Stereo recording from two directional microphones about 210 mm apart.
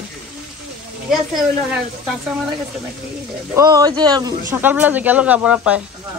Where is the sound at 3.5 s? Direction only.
20° right (ahead or behind).